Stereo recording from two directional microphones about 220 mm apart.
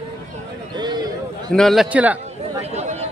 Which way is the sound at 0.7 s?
20° right (ahead or behind).